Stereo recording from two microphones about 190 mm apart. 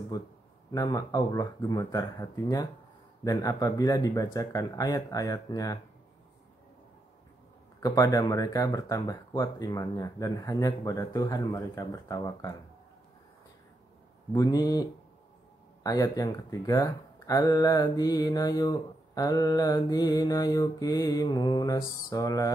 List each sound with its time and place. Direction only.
0.1 s speech: 20° left (ahead or behind)
7.8 s speech: 20° left (ahead or behind)
14.3 s speech: 20° left (ahead or behind)